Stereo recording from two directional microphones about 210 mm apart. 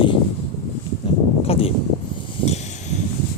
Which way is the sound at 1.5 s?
25° left (ahead or behind).